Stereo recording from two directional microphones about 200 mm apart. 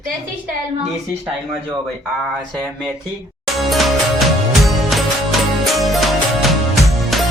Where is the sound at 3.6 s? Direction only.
Centre (ahead or behind).